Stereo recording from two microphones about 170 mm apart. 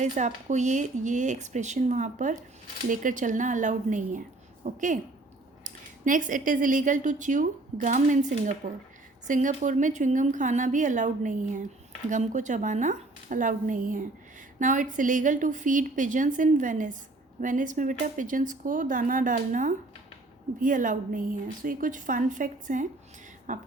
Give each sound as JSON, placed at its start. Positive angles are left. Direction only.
{"t": 0.0, "sound": "speech", "side_deg": -45}